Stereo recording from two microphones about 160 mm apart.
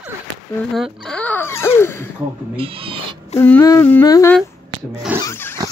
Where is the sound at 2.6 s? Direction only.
35° right (ahead or behind).